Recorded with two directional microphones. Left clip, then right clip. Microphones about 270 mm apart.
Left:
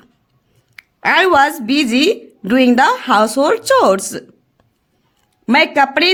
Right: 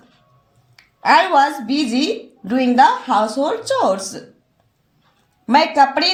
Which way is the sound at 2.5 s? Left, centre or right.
Left.